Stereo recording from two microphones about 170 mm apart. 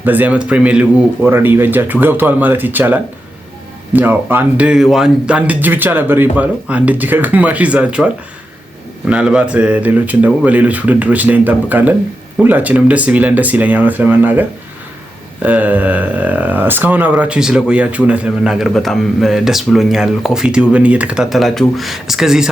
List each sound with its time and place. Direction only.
0.0 s speech: 10° right (ahead or behind)